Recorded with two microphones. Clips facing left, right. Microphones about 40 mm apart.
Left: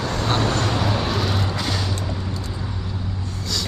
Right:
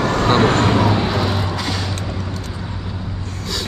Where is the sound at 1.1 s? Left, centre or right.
Centre.